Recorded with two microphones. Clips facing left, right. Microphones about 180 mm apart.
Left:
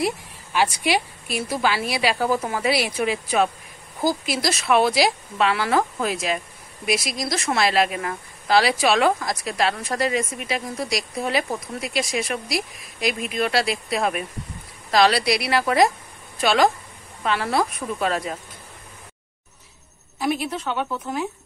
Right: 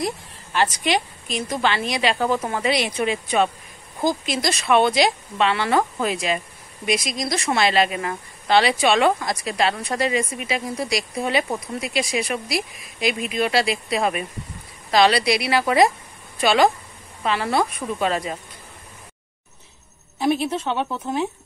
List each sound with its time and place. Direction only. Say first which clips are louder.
0.0 s a woman's voice: left 2 dB; 10° left (ahead or behind)
20.2 s a woman's voice: right 3 dB; 25° right (ahead or behind)